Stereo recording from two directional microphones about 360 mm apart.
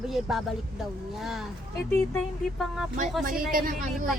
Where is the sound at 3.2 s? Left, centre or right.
Right.